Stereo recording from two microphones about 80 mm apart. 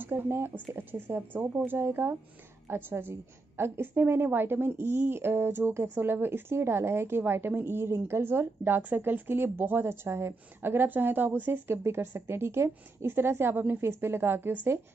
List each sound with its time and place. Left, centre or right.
0.0 s a woman's voice: right